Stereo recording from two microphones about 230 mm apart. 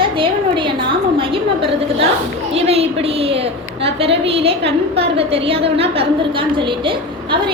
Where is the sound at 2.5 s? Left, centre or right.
Right.